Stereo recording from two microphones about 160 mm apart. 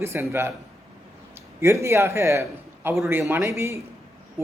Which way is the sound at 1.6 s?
15° right (ahead or behind).